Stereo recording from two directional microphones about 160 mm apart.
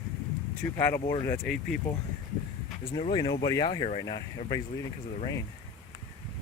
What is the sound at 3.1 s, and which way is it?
Speech, 25° left (ahead or behind).